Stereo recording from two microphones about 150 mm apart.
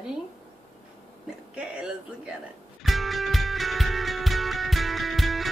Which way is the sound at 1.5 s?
5° right (ahead or behind).